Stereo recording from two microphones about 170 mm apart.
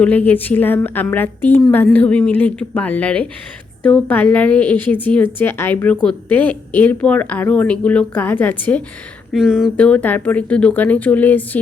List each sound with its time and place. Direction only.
0.0 s a woman's voice: 10° left (ahead or behind)
9.3 s a woman's voice: centre (ahead or behind)